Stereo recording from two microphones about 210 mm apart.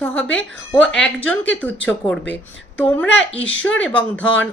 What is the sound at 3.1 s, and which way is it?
Speech, 60° left (ahead or behind).